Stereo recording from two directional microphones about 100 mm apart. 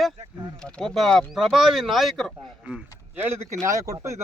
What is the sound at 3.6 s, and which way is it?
Speech, 35° right (ahead or behind).